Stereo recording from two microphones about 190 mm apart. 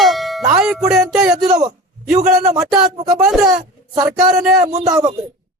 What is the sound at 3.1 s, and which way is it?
Speech, 5° right (ahead or behind).